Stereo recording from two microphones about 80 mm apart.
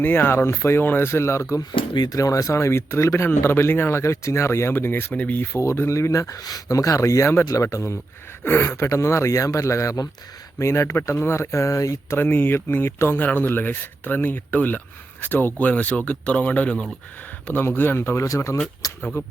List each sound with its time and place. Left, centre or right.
0.0 s speech: left
1.7 s speech: left
2.1 s speech: left
5.5 s speech: left
12.1 s speech: left; by 16.9 s centre
17.4 s speech: left
18.8 s speech: left